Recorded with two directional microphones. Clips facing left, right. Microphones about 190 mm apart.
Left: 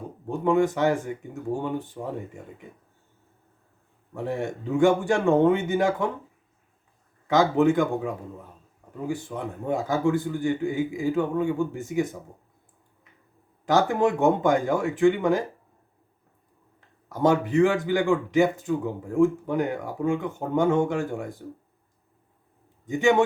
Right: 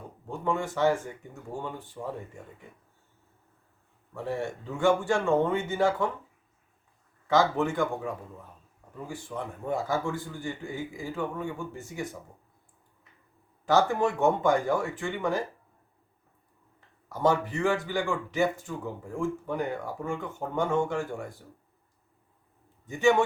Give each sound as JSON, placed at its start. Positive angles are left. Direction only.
{"t": 0.3, "sound": "a man's voice", "side_deg": 20}
{"t": 4.1, "sound": "a man's voice", "side_deg": 15}
{"t": 7.3, "sound": "a man's voice", "side_deg": 15}
{"t": 13.7, "sound": "a man's voice", "side_deg": 15}
{"t": 17.1, "sound": "a man's voice", "side_deg": 15}
{"t": 22.9, "sound": "a man's voice", "side_deg": 20}